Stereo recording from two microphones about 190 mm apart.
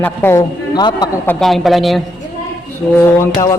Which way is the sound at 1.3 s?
Centre (ahead or behind).